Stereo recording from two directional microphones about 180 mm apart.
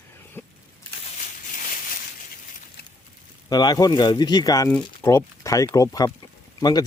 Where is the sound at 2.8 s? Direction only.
65° left (ahead or behind).